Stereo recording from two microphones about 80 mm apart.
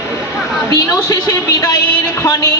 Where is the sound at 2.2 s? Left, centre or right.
Left.